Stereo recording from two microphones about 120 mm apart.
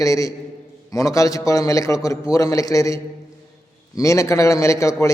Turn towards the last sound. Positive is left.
turn(degrees=25)  # may be behind; listen again after turning